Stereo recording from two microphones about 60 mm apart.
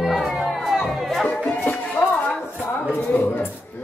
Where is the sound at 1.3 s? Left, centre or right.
Left.